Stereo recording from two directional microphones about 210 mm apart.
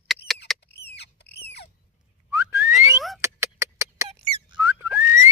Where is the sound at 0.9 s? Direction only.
50° left (ahead or behind).